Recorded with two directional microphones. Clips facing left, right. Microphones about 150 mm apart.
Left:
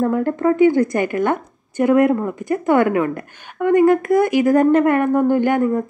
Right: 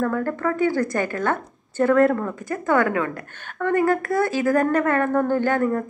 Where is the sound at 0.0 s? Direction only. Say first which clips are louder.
Left 5 dB; 20° left (ahead or behind).